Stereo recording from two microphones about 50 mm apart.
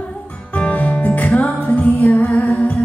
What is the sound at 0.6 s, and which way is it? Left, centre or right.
Music, left.